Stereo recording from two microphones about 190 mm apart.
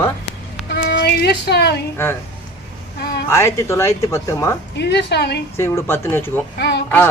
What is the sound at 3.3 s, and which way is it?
Speech, 15° left (ahead or behind).